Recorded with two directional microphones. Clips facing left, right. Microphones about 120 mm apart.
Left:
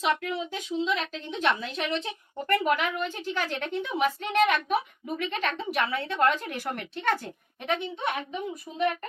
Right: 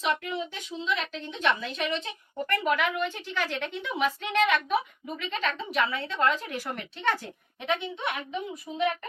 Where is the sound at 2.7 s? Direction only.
40° left (ahead or behind); by 6.8 s 55° left (ahead or behind).